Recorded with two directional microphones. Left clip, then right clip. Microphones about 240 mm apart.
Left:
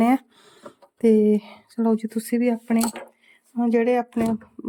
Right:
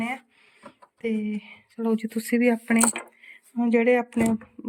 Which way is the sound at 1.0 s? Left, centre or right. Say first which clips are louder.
Left 12 dB; left.